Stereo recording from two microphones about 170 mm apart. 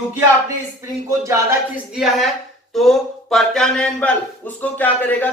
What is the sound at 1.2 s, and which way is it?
Speech, 15° right (ahead or behind).